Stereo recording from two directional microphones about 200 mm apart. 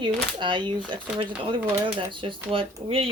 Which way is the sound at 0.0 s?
25° right (ahead or behind).